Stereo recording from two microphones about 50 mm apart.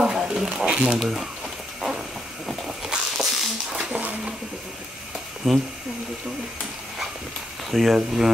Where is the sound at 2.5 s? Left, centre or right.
Centre.